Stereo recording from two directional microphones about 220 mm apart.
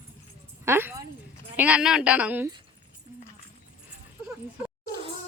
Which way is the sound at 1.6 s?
5° right (ahead or behind).